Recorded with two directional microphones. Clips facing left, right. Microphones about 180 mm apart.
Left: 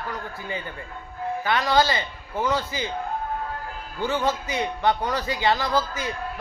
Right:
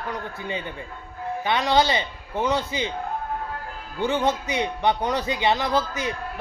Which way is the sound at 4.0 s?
20° right (ahead or behind).